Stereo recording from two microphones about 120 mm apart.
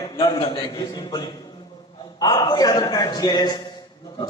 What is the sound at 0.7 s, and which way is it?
A man's voice, 35° left (ahead or behind).